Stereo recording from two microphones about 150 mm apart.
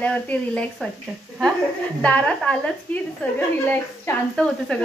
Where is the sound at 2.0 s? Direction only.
5° left (ahead or behind).